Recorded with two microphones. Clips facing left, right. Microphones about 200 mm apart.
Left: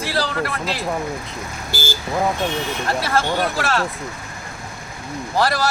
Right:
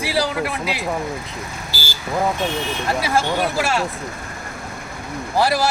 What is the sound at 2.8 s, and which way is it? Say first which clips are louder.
Speech: right 1 dB; 10° right (ahead or behind).